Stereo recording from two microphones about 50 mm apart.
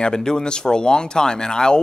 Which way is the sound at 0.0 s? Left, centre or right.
Centre.